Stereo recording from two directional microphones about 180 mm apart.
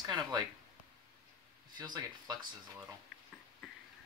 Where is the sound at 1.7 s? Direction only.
20° right (ahead or behind).